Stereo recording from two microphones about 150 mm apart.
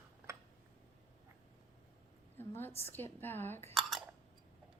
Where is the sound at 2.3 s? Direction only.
15° left (ahead or behind).